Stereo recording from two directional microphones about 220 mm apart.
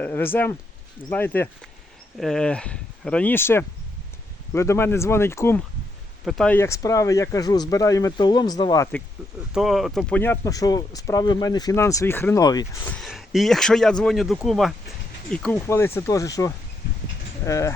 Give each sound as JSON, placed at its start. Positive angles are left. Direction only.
{"t": 0.0, "sound": "speech", "side_deg": 10}
{"t": 9.5, "sound": "speech", "side_deg": 0}
{"t": 12.9, "sound": "speech", "side_deg": 0}